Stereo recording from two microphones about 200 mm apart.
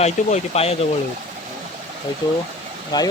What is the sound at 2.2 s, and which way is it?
Speech, 20° left (ahead or behind).